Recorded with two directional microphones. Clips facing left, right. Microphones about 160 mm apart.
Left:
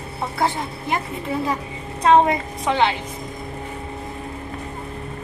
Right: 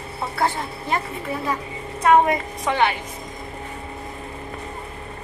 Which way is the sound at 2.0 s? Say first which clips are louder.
Left 1 dB; 25° left (ahead or behind).